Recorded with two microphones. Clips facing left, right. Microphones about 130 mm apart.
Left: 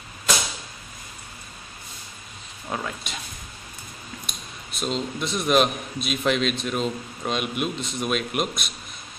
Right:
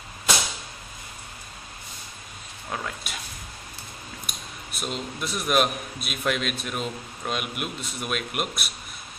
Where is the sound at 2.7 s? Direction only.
5° left (ahead or behind).